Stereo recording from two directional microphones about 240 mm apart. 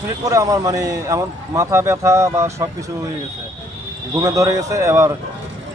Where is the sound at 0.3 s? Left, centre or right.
Centre.